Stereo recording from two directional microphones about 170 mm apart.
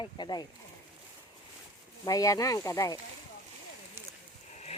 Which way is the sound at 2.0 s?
20° left (ahead or behind).